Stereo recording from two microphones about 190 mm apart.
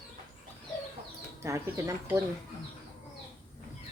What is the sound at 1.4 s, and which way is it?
Speech, 15° right (ahead or behind).